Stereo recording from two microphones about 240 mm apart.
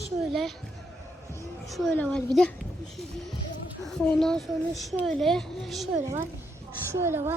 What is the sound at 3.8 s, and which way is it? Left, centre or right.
A child's voice, centre.